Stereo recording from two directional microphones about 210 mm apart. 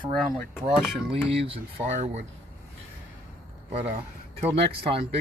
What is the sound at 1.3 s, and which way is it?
Speech, 25° right (ahead or behind).